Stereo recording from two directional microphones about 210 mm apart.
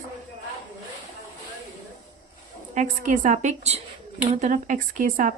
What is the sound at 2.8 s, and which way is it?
Speech, 35° right (ahead or behind).